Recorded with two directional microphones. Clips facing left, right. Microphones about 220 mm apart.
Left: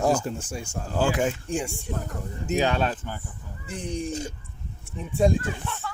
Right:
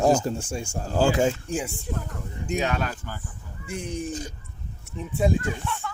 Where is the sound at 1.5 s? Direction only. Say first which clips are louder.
Even; centre (ahead or behind).